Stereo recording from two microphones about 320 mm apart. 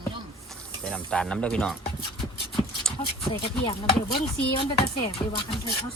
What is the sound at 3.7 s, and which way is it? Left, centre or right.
Chopping, centre.